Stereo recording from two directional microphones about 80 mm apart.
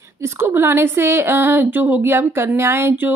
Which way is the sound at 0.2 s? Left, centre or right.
Right.